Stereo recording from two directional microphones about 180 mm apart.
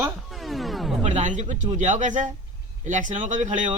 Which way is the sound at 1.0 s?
40° right (ahead or behind).